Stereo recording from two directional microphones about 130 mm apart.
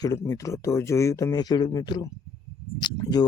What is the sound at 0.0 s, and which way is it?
A man's voice, 25° left (ahead or behind).